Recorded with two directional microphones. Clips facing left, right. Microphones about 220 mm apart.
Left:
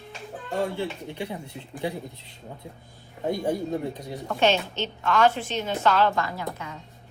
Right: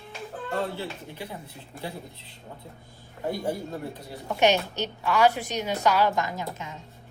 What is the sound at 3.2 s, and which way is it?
Speech, 20° left (ahead or behind).